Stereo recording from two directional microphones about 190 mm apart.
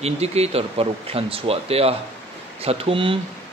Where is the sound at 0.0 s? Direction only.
35° right (ahead or behind).